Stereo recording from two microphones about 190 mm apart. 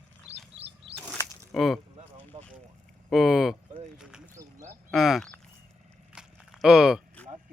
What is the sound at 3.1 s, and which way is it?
Speech, centre (ahead or behind).